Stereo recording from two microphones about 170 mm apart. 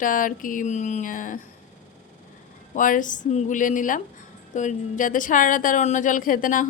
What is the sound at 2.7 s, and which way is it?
A woman's voice, 50° left (ahead or behind).